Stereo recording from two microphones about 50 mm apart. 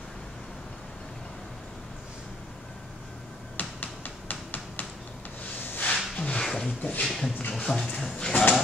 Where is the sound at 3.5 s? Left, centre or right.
Left.